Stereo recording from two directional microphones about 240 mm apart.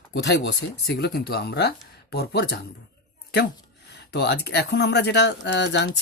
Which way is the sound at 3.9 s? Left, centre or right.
Left.